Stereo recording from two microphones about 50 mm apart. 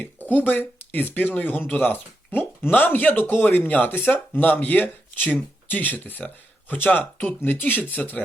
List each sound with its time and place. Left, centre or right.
0.0 s speech: left
7.0 s speech: left
7.4 s speech: left